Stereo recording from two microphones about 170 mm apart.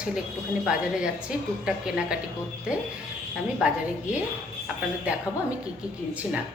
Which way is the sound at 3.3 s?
5° right (ahead or behind).